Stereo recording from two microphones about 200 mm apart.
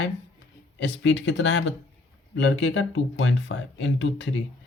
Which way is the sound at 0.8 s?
60° left (ahead or behind).